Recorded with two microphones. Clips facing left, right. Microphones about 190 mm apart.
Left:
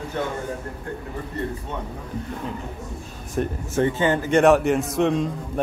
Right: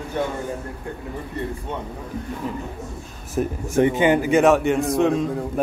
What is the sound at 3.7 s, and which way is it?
Speech, 15° right (ahead or behind).